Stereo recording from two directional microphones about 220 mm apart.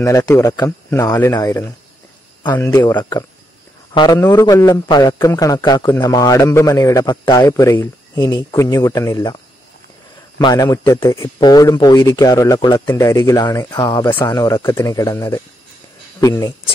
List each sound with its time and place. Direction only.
0.0 s a man's voice: 15° left (ahead or behind)
10.4 s a man's voice: 15° left (ahead or behind)